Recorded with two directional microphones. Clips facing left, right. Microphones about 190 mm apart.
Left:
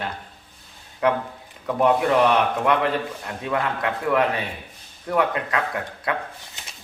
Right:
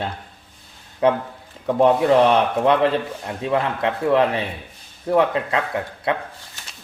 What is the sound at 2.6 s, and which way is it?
Speech, 25° right (ahead or behind).